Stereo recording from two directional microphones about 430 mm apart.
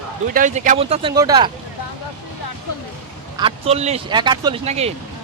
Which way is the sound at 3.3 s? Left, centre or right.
Centre.